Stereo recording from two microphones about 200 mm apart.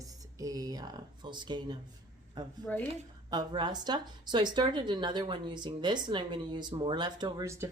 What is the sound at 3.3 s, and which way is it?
A woman's voice, 20° right (ahead or behind).